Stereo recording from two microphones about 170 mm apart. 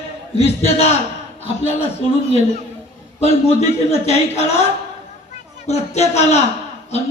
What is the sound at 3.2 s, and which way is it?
A man's voice, 40° left (ahead or behind).